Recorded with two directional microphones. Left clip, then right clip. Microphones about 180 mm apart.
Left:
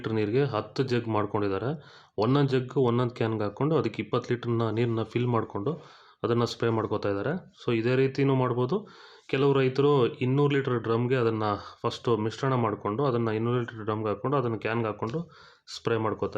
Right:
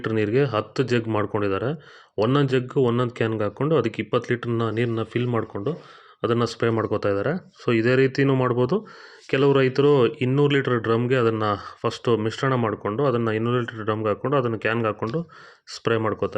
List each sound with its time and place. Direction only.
0.0 s speech: 15° right (ahead or behind)